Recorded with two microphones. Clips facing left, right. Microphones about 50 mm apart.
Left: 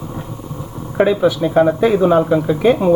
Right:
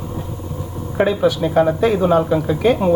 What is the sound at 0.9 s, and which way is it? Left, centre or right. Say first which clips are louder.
Speech: left 2 dB; centre.